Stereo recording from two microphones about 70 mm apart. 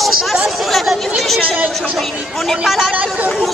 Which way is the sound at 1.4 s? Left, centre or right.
Right.